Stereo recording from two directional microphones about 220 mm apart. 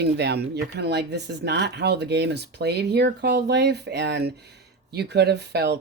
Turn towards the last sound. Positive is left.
turn(degrees=-50)  # may be behind; listen again after turning